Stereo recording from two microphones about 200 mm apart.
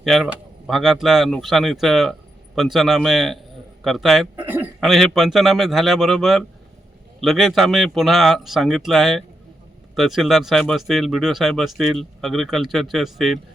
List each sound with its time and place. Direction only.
0.0 s speech: centre (ahead or behind)